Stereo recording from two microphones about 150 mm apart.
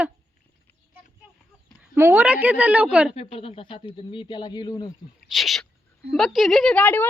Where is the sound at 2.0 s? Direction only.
15° right (ahead or behind).